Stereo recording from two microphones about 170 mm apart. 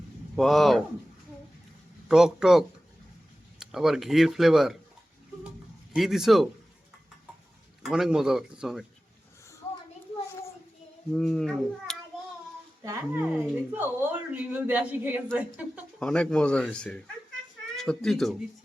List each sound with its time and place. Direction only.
0.3 s speech: centre (ahead or behind)
2.0 s speech: 5° right (ahead or behind)
5.9 s speech: centre (ahead or behind)
7.8 s speech: 5° right (ahead or behind)
11.1 s speech: centre (ahead or behind)
12.8 s speech: 20° right (ahead or behind)
16.0 s speech: 5° left (ahead or behind)